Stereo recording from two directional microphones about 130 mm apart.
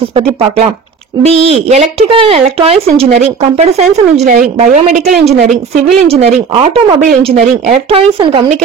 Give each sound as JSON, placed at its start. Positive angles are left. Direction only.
{"t": 1.2, "sound": "speech", "side_deg": -55}
{"t": 4.2, "sound": "speech", "side_deg": -75}
{"t": 6.0, "sound": "speech", "side_deg": -45}
{"t": 7.1, "sound": "speech", "side_deg": -60}